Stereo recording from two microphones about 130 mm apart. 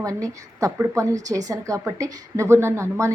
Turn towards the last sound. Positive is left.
turn(degrees=-20)  # may be behind; listen again after turning